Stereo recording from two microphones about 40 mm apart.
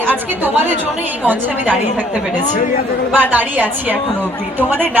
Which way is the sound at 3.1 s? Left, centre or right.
Right.